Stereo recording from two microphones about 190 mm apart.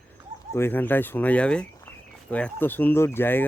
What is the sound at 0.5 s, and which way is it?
Speech, 10° left (ahead or behind).